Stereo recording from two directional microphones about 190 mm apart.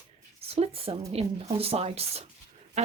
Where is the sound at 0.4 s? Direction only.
30° right (ahead or behind).